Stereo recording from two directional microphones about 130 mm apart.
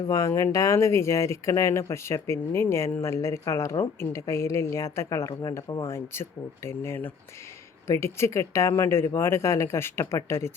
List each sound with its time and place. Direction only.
0.1 s speech: 25° left (ahead or behind)